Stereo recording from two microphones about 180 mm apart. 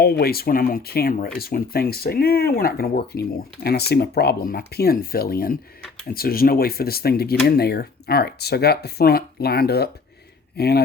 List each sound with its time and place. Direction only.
0.0 s speech: 60° left (ahead or behind)